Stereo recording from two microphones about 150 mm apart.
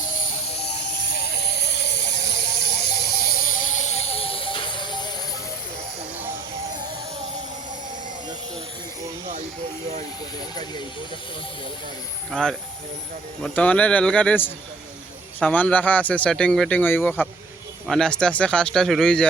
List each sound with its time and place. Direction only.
1.1 s music: 90° left; by 5.1 s 30° left (ahead or behind)
12.3 s speech: 5° left (ahead or behind)